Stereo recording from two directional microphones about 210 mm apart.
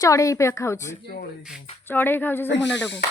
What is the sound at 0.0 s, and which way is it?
Speech, 15° left (ahead or behind).